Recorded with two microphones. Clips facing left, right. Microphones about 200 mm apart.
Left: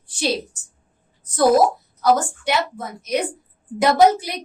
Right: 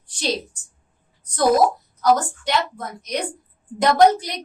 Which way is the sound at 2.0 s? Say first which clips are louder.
Even; 10° left (ahead or behind).